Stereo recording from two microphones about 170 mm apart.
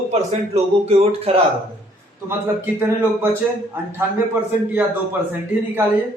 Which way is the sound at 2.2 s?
15° right (ahead or behind).